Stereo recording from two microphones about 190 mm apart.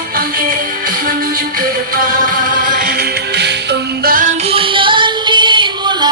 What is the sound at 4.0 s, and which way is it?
Music, 50° right (ahead or behind).